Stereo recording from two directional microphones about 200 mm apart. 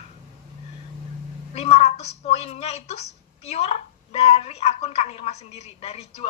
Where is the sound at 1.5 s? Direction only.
30° left (ahead or behind).